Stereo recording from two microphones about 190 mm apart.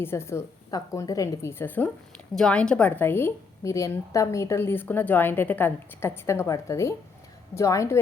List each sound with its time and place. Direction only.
0.0 s a woman's voice: 15° left (ahead or behind)